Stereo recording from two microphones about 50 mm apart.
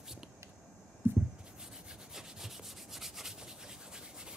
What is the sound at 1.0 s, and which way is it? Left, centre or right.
Writing, right.